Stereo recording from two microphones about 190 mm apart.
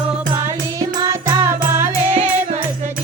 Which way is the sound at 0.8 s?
15° right (ahead or behind).